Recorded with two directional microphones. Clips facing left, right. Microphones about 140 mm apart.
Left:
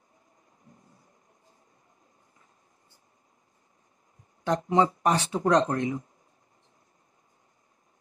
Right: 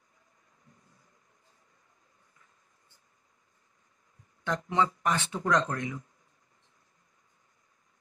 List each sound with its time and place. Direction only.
4.5 s speech: 35° left (ahead or behind)